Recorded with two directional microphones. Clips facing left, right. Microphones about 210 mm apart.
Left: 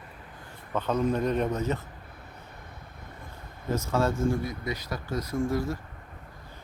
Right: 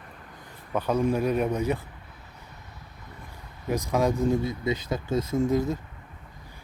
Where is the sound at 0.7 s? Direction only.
10° right (ahead or behind).